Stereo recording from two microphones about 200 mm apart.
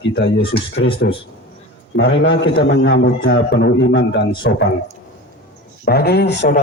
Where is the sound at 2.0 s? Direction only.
65° left (ahead or behind).